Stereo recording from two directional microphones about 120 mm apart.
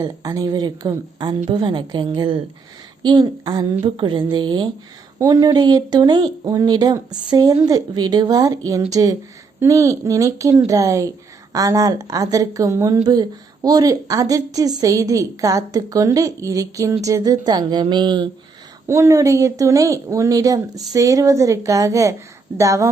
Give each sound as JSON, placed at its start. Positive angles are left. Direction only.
{"t": 0.0, "sound": "a woman's voice", "side_deg": -30}
{"t": 18.9, "sound": "a woman's voice", "side_deg": -25}